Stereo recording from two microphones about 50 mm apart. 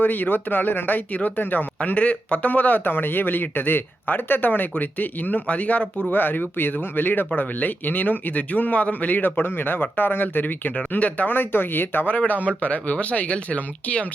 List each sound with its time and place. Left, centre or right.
0.0 s speech: left